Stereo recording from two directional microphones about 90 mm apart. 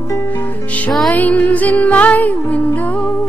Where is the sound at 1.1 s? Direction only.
15° left (ahead or behind).